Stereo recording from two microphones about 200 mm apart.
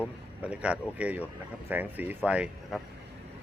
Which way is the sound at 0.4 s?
5° right (ahead or behind).